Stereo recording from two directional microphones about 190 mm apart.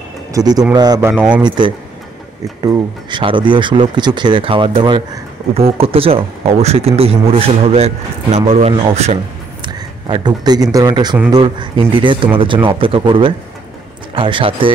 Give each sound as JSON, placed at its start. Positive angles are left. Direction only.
{"t": 0.3, "sound": "speech", "side_deg": -20}
{"t": 1.1, "sound": "speech", "side_deg": -5}
{"t": 2.6, "sound": "speech", "side_deg": -20}
{"t": 9.6, "sound": "a man's voice", "side_deg": -25}